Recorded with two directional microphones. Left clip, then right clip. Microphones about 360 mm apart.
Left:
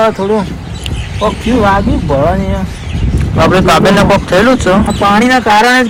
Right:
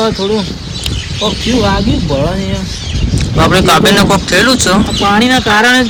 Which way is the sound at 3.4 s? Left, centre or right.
Centre.